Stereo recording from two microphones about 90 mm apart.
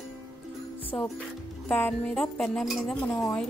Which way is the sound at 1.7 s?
15° left (ahead or behind).